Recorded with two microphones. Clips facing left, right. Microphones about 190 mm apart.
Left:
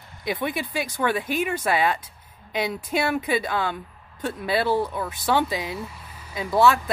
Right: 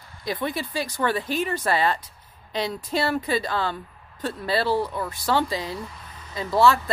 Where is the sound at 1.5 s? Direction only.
Centre (ahead or behind).